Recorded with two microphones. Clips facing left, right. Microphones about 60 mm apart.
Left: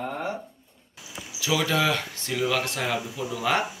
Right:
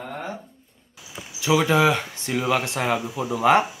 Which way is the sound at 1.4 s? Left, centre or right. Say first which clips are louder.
Right 6 dB; right.